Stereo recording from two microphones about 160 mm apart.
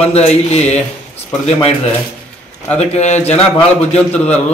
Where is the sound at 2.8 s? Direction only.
45° left (ahead or behind).